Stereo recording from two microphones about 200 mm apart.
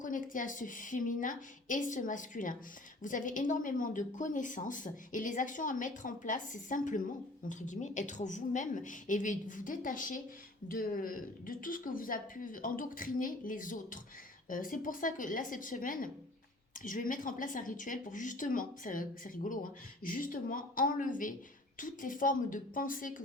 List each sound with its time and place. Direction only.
0.0 s a woman's voice: 40° left (ahead or behind)